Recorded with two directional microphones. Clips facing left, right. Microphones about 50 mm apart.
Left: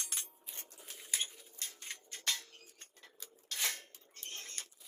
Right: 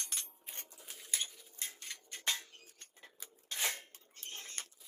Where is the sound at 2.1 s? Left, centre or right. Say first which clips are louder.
Right 1 dB; right.